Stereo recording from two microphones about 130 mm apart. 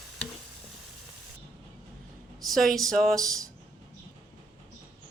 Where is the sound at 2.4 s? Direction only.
Centre (ahead or behind).